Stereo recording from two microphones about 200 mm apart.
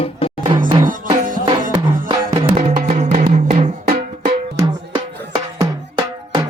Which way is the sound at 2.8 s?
35° right (ahead or behind).